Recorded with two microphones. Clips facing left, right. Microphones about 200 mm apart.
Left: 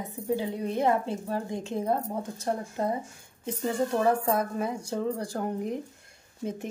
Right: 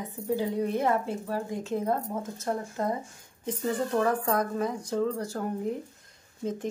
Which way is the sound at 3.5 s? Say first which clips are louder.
Left 1 dB; 10° left (ahead or behind).